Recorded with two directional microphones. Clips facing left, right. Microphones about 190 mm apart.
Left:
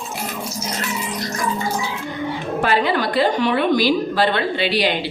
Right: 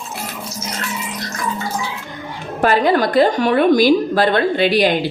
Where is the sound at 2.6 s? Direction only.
45° right (ahead or behind).